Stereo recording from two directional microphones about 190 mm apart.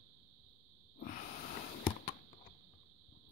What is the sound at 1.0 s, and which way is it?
Snort, 45° left (ahead or behind).